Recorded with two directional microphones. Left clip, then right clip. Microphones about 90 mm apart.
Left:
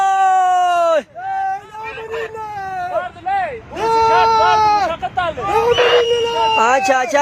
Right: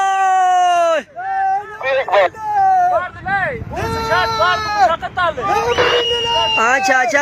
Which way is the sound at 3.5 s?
30° left (ahead or behind).